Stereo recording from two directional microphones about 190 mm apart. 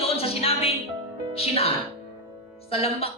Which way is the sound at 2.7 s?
30° left (ahead or behind).